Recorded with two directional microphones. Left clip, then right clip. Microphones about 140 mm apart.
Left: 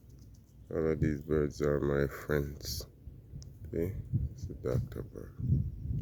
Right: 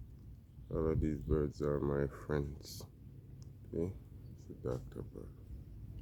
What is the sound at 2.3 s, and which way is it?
Speech, 15° left (ahead or behind).